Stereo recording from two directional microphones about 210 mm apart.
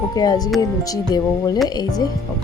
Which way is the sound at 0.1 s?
20° left (ahead or behind).